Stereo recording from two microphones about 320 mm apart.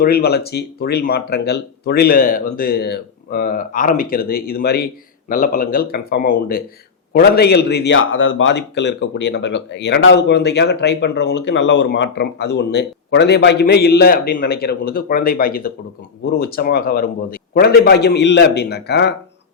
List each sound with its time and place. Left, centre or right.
0.0 s a man's voice: left